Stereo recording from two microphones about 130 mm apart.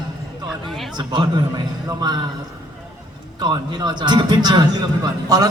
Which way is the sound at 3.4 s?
35° right (ahead or behind).